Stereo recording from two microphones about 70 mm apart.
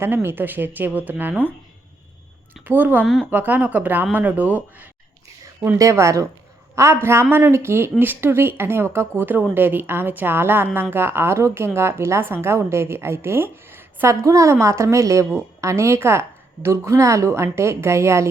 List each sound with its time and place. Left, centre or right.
0.0 s speech: right
2.6 s speech: right
5.7 s a woman's voice: right
14.3 s a woman's voice: right